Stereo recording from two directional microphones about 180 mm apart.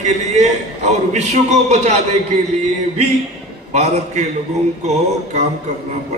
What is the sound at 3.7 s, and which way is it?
Speech, 40° right (ahead or behind).